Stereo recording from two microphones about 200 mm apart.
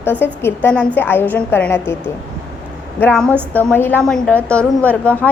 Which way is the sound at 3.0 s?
5° left (ahead or behind).